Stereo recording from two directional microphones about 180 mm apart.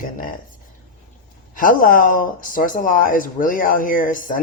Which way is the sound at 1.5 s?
50° left (ahead or behind).